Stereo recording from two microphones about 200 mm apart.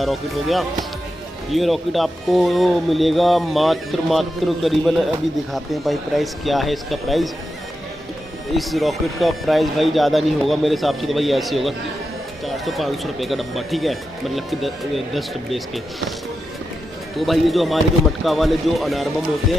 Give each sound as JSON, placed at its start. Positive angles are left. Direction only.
{"t": 0.0, "sound": "speech", "side_deg": 0}
{"t": 8.5, "sound": "speech", "side_deg": 0}
{"t": 17.2, "sound": "speech", "side_deg": 0}